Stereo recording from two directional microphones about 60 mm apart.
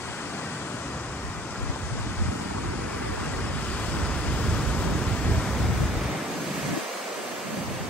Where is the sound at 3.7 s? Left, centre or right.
Centre.